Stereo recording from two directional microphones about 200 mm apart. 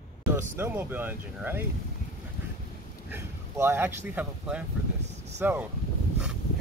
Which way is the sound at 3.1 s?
10° right (ahead or behind).